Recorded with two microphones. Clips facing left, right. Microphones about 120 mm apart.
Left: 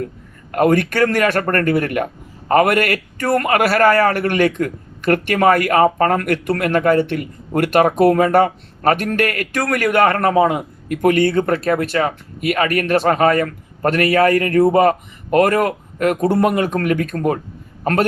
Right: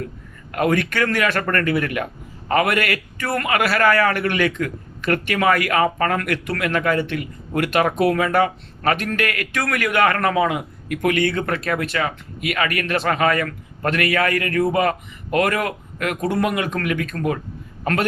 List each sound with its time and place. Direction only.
0.5 s a man's voice: 40° left (ahead or behind)